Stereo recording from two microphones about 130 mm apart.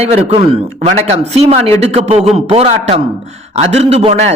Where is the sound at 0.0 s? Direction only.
50° right (ahead or behind).